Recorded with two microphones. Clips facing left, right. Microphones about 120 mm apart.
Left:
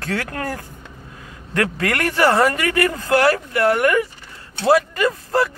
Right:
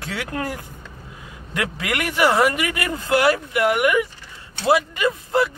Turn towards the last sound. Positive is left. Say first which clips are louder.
# left 1 dB
turn(degrees=-20)  # may be behind; listen again after turning